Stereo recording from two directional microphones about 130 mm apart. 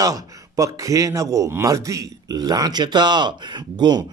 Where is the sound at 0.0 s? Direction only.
25° right (ahead or behind).